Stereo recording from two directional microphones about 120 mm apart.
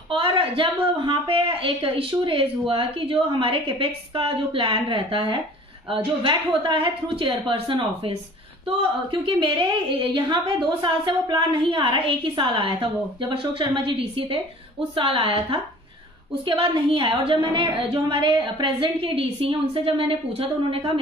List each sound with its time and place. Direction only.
0.1 s a woman's voice: 50° right (ahead or behind)